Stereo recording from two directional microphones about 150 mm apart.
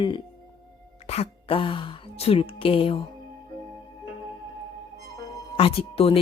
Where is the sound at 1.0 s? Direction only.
45° left (ahead or behind).